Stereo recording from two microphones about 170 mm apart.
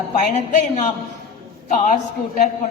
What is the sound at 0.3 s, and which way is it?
A woman's voice, 45° left (ahead or behind).